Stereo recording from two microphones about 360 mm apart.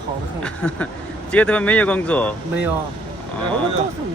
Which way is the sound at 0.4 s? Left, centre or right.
Centre.